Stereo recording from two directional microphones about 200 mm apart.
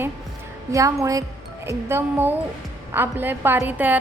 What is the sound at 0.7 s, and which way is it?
A woman's voice, 15° right (ahead or behind).